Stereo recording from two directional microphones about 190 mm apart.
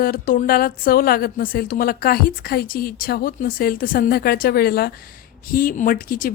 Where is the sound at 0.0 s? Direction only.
45° left (ahead or behind).